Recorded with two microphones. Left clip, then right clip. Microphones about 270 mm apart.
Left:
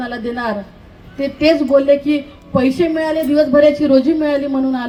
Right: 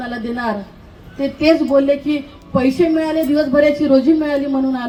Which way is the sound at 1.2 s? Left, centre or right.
Left.